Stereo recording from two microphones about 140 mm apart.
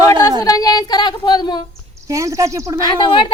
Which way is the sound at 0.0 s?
25° left (ahead or behind).